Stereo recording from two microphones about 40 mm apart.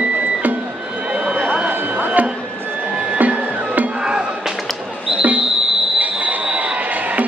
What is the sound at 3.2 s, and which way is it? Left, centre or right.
Music, right.